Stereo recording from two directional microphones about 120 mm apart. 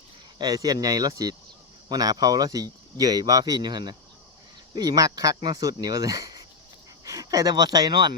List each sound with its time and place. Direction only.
0.3 s speech: 30° right (ahead or behind)